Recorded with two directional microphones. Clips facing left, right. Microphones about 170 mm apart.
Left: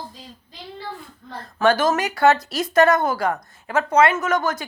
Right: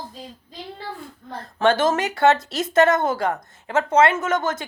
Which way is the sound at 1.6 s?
25° right (ahead or behind).